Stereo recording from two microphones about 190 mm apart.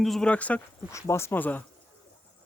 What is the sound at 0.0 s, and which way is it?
Speech, centre (ahead or behind).